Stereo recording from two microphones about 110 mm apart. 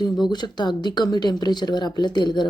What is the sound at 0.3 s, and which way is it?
Speech, 40° left (ahead or behind).